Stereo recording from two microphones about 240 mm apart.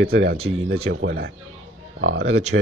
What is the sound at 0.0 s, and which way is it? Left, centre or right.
Speech, right.